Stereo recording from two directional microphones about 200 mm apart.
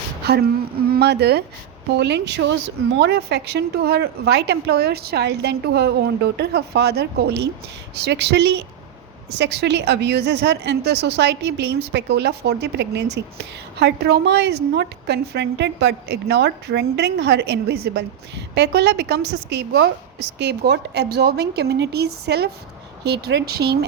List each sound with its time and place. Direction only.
0.9 s a woman's voice: 55° right (ahead or behind)